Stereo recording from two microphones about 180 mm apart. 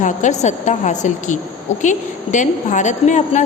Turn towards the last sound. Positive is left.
turn(degrees=40)  # may be behind; listen again after turning